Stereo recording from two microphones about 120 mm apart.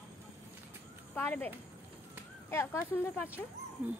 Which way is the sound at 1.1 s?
15° left (ahead or behind).